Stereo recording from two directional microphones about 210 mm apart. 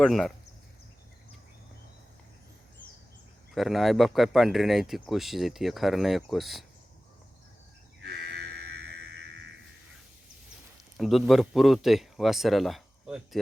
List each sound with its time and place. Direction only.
0.0 s speech: centre (ahead or behind)
3.5 s speech: centre (ahead or behind)
8.5 s music: 50° right (ahead or behind)
10.9 s speech: centre (ahead or behind)